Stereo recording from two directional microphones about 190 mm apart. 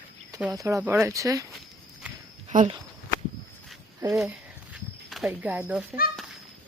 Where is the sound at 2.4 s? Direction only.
35° right (ahead or behind).